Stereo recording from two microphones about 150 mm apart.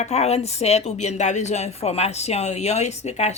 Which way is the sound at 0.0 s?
45° left (ahead or behind).